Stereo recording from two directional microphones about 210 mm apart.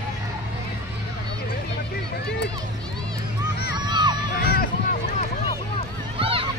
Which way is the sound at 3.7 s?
20° right (ahead or behind).